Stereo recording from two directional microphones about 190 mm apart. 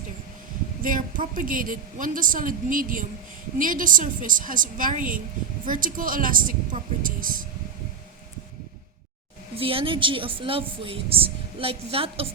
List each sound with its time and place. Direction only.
0.8 s a woman's voice: 45° right (ahead or behind)
9.6 s speech: 30° right (ahead or behind)